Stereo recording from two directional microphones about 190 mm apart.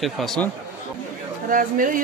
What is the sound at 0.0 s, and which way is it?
Speech, centre (ahead or behind).